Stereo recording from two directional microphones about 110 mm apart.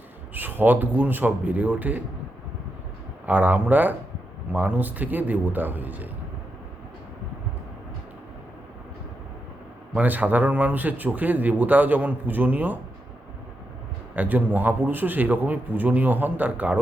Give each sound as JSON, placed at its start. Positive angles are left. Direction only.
{"t": 0.3, "sound": "speech", "side_deg": -15}
{"t": 3.2, "sound": "speech", "side_deg": -15}
{"t": 9.9, "sound": "speech", "side_deg": -15}
{"t": 14.2, "sound": "speech", "side_deg": -15}